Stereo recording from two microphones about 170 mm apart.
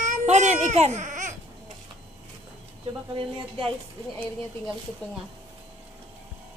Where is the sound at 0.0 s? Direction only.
45° right (ahead or behind).